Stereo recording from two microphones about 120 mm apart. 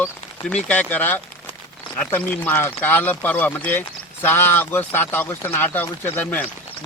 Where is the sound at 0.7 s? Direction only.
15° left (ahead or behind).